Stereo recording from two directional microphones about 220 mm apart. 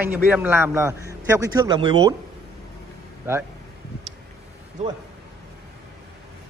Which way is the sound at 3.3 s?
10° right (ahead or behind).